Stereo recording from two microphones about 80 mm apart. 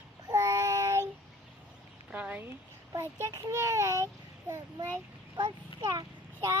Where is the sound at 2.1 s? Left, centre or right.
Centre.